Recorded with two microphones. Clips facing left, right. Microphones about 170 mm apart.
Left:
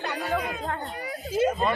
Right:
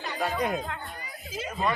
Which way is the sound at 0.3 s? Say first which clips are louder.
Even; 60° left (ahead or behind).